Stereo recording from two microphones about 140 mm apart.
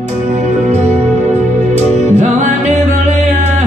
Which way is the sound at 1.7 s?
55° right (ahead or behind).